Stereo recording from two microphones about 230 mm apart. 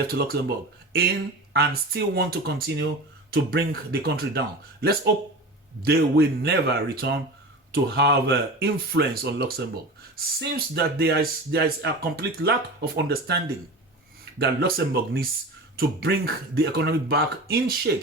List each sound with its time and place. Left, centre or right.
0.1 s speech: right
1.5 s speech: right